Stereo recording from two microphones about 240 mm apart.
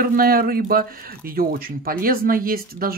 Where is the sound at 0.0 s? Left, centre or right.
Right.